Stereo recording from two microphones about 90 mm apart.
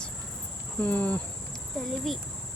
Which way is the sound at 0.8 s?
15° left (ahead or behind).